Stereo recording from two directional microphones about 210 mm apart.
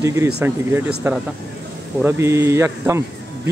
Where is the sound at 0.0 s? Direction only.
15° right (ahead or behind).